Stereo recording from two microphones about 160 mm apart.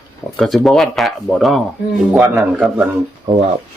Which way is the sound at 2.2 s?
10° right (ahead or behind).